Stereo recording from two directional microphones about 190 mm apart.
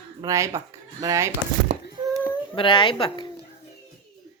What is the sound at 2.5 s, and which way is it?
Speech, 25° left (ahead or behind).